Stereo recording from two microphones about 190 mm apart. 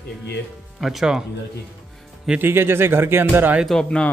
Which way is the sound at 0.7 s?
Centre (ahead or behind).